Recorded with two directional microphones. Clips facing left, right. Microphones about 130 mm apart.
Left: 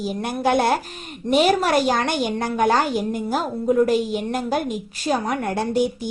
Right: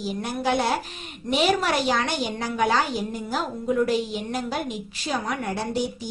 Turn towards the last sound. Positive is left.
turn(degrees=55)  # may be behind; listen again after turning